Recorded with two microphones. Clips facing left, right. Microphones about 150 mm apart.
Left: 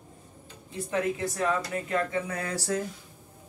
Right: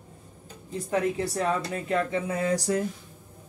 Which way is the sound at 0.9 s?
35° right (ahead or behind).